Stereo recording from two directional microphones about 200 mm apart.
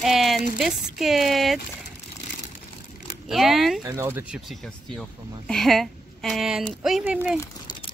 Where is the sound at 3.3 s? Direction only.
Centre (ahead or behind).